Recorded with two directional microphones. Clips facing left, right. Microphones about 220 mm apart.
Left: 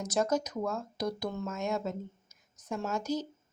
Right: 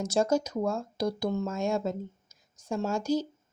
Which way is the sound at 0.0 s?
30° right (ahead or behind).